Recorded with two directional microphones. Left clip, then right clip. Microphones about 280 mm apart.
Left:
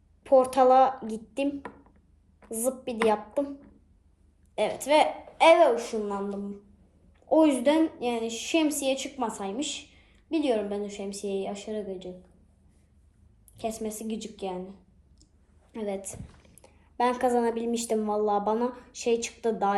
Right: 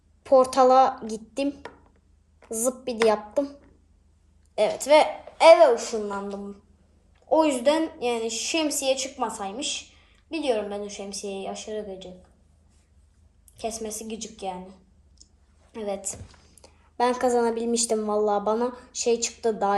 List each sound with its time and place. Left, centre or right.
0.2 s a woman's voice: right
4.5 s a woman's voice: centre
7.3 s a woman's voice: centre
13.6 s a woman's voice: centre